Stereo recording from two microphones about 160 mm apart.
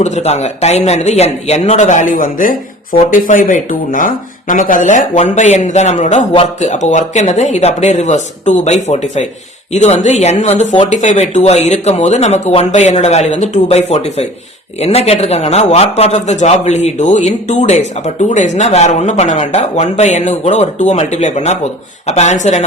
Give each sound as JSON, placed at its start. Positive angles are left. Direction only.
{"t": 0.0, "sound": "speech", "side_deg": 45}